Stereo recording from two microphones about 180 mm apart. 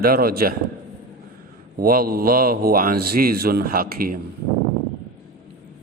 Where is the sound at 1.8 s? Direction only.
55° right (ahead or behind).